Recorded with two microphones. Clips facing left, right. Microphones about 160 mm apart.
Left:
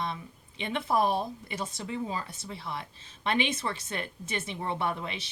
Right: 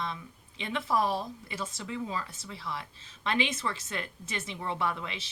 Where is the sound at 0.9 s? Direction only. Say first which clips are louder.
Left 2 dB; 55° left (ahead or behind).